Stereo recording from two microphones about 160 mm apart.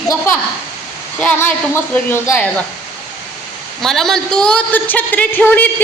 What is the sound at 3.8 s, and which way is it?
A woman's voice, centre (ahead or behind).